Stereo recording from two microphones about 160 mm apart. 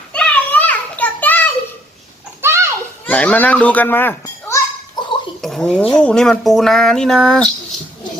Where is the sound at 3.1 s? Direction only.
10° left (ahead or behind).